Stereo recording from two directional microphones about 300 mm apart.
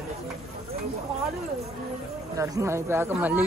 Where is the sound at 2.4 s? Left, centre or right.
Centre.